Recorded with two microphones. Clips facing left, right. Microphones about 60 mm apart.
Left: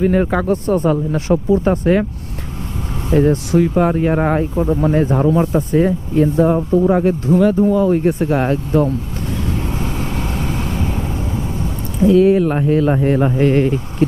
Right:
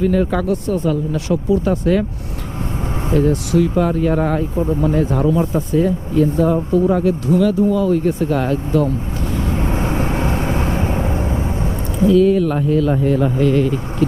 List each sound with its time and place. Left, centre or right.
0.0 s speech: left
3.2 s speech: left
9.6 s vehicle: right
12.0 s speech: left